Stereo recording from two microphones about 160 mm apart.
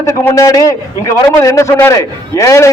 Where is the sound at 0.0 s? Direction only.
20° left (ahead or behind).